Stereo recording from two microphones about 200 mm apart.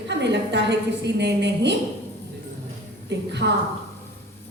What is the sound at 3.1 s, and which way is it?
Speech, 60° right (ahead or behind).